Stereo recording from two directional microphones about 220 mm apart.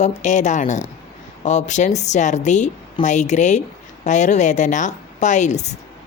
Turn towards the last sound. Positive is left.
turn(degrees=30)  # may be behind; listen again after turning